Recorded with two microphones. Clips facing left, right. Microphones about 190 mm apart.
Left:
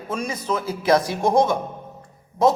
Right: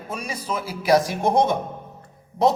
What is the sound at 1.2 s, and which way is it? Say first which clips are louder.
Speech: left 1 dB; 60° right (ahead or behind).